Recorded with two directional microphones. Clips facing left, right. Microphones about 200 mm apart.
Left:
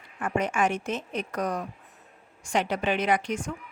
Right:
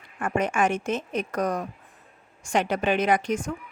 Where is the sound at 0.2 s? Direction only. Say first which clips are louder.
Right 2 dB; 50° right (ahead or behind).